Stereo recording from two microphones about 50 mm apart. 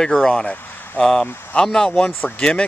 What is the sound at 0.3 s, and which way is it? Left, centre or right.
Speech, centre.